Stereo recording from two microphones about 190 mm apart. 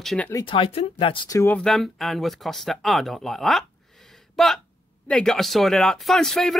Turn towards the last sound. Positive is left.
turn(degrees=0)  # may be behind; listen again after turning